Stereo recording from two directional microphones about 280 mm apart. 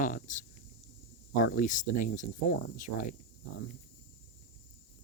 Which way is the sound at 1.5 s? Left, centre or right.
Left.